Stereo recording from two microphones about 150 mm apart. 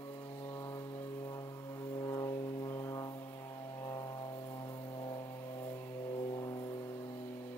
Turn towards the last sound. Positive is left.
turn(degrees=25)  # may be behind; listen again after turning